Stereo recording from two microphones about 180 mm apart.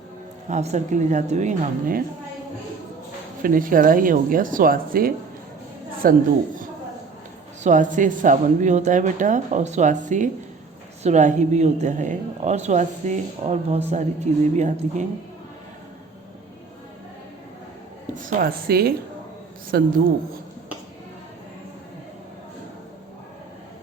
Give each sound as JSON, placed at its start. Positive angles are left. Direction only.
{"t": 0.4, "sound": "a woman's voice", "side_deg": -40}
{"t": 3.4, "sound": "speech", "side_deg": -50}
{"t": 7.6, "sound": "a woman's voice", "side_deg": -45}
{"t": 18.2, "sound": "a woman's voice", "side_deg": -50}